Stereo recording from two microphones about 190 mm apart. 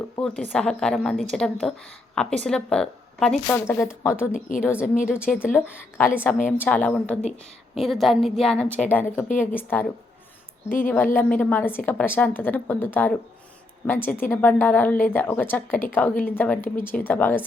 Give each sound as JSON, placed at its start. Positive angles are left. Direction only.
{"t": 0.2, "sound": "a woman's voice", "side_deg": 5}
{"t": 4.3, "sound": "a woman's voice", "side_deg": 45}
{"t": 4.6, "sound": "a woman's voice", "side_deg": 10}
{"t": 10.8, "sound": "a woman's voice", "side_deg": 10}